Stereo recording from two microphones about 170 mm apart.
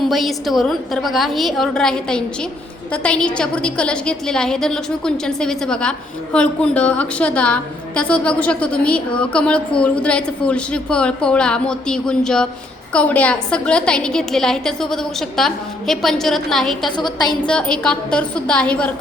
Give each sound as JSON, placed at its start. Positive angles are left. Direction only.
{"t": 0.1, "sound": "a woman's voice", "side_deg": 0}
{"t": 17.0, "sound": "a woman's voice", "side_deg": 25}
{"t": 17.4, "sound": "a woman's voice", "side_deg": 5}